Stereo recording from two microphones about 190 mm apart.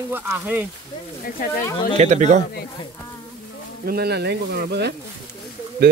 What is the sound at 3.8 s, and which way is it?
Speech, 55° right (ahead or behind).